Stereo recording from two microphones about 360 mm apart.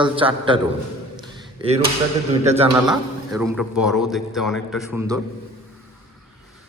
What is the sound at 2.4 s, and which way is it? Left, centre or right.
Speech, centre.